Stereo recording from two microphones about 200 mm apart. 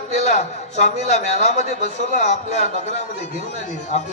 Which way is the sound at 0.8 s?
35° left (ahead or behind).